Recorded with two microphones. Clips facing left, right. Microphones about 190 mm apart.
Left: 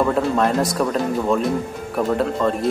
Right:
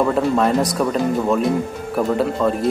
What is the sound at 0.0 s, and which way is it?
Speech, centre (ahead or behind).